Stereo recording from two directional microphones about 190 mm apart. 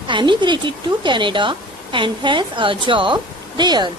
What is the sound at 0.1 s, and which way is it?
Speech, 25° right (ahead or behind).